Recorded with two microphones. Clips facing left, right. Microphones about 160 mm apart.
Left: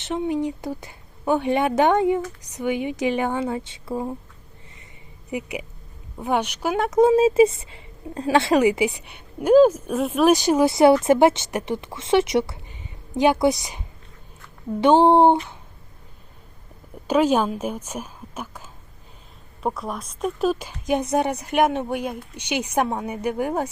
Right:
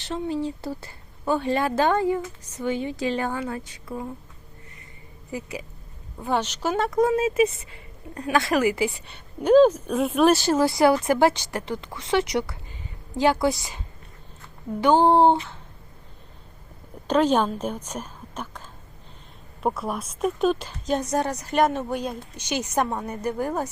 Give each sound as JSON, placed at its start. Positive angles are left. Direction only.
{"t": 0.0, "sound": "a woman's voice", "side_deg": 20}
{"t": 5.3, "sound": "speech", "side_deg": 15}
{"t": 7.0, "sound": "a woman's voice", "side_deg": 25}
{"t": 9.0, "sound": "a woman's voice", "side_deg": 10}
{"t": 17.1, "sound": "a woman's voice", "side_deg": 10}
{"t": 19.6, "sound": "speech", "side_deg": 0}
{"t": 22.4, "sound": "a woman's voice", "side_deg": 65}
{"t": 22.6, "sound": "speech", "side_deg": 10}